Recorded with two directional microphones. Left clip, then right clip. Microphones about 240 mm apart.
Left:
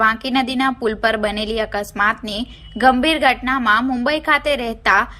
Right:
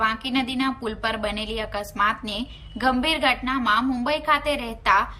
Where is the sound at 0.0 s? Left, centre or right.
Centre.